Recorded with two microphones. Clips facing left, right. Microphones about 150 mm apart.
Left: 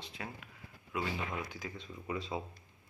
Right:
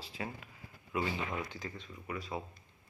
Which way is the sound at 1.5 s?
85° left.